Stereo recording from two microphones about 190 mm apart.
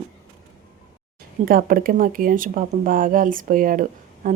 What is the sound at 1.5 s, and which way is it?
Speech, 50° right (ahead or behind).